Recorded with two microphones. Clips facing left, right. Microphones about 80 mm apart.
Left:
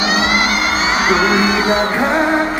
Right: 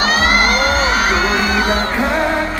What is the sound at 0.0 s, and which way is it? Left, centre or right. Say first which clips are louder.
Vehicle: right 1 dB; right.